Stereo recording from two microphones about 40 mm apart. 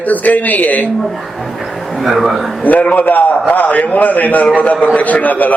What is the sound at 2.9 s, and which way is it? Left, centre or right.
A man's voice, left.